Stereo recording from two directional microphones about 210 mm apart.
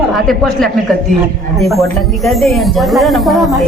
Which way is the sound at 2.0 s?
Centre (ahead or behind).